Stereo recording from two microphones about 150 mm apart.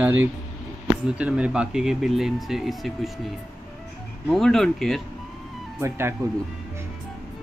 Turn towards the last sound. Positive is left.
turn(degrees=-15)  # may be behind; listen again after turning